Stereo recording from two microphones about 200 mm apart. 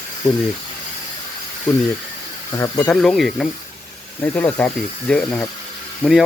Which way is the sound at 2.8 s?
Centre (ahead or behind).